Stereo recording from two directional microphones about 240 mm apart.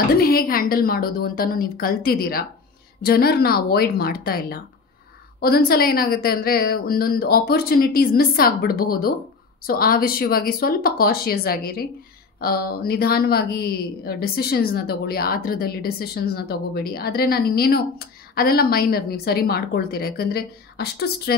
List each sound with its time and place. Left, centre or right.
0.2 s speech: left